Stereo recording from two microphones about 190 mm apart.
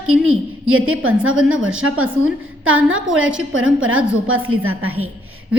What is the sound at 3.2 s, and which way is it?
Speech, 5° right (ahead or behind).